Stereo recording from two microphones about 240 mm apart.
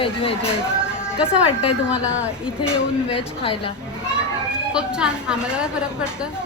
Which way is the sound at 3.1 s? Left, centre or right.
Left.